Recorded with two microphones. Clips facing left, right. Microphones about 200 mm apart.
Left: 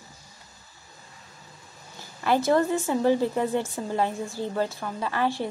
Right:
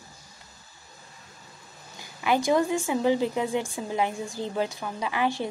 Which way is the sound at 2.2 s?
15° right (ahead or behind).